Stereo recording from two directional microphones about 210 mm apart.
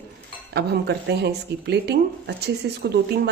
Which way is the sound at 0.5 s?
50° right (ahead or behind).